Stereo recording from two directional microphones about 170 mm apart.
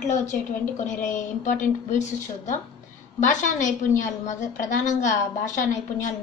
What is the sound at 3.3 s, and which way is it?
A woman's voice, 45° left (ahead or behind).